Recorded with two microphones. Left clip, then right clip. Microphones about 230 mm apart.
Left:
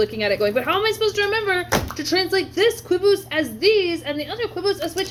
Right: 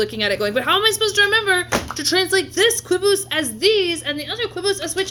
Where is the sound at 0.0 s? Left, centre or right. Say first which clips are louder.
Even; right.